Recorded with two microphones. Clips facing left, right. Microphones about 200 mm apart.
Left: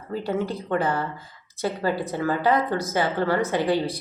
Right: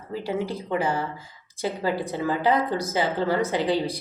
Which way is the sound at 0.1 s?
15° right (ahead or behind).